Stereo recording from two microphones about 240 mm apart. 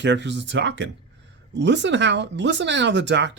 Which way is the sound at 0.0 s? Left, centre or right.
Right.